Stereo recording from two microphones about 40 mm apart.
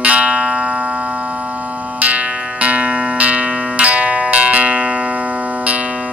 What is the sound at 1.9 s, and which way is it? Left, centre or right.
Music, right.